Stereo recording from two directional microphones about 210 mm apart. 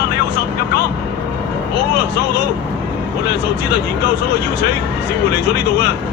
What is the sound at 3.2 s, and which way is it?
Speech, 50° left (ahead or behind).